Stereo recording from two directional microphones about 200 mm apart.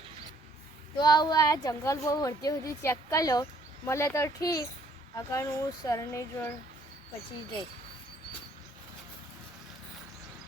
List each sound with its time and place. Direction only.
0.9 s a woman's voice: 20° left (ahead or behind)